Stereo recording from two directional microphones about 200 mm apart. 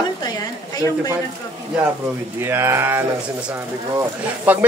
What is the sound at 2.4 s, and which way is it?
Speech, 10° right (ahead or behind).